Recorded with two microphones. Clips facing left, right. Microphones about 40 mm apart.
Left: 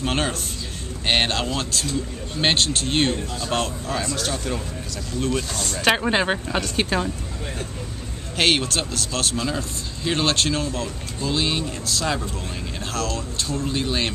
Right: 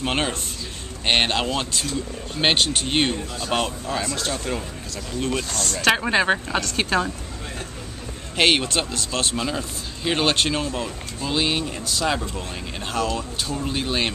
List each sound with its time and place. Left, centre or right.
0.0 s speech: centre
1.4 s speech: centre
4.0 s speech: right
5.5 s speech: centre
6.3 s speech: centre
8.4 s speech: centre